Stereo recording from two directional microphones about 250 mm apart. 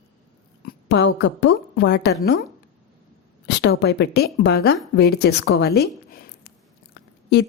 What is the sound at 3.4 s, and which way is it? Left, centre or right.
A woman's voice, left.